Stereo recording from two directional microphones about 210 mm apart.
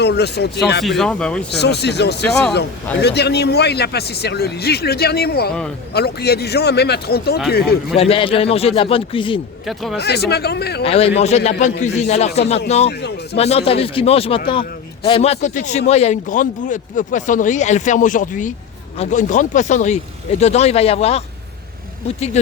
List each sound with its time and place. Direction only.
0.0 s a man's voice: 50° left (ahead or behind)
0.9 s speech: centre (ahead or behind)
1.5 s a man's voice: 50° left (ahead or behind)
7.9 s speech: 25° left (ahead or behind)
9.6 s speech: centre (ahead or behind)
10.0 s a man's voice: 50° left (ahead or behind)
10.8 s speech: 30° left (ahead or behind)
12.9 s a man's voice: 50° left (ahead or behind)
13.3 s speech: 30° left (ahead or behind)